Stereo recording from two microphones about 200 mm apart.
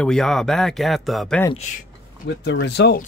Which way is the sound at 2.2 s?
60° left (ahead or behind).